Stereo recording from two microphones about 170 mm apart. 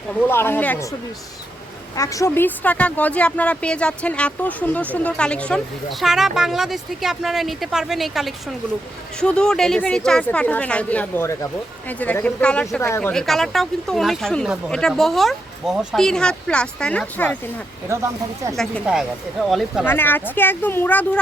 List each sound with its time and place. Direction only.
0.2 s speech: 15° left (ahead or behind)
2.0 s speech: 20° left (ahead or behind)
17.8 s speech: 15° right (ahead or behind)
18.5 s speech: centre (ahead or behind)
19.8 s speech: 10° left (ahead or behind)